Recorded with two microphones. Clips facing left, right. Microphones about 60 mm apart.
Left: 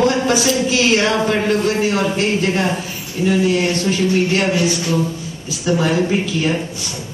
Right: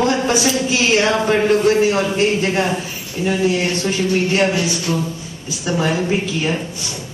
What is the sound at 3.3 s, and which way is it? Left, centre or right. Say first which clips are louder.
Speech: left 2 dB; right.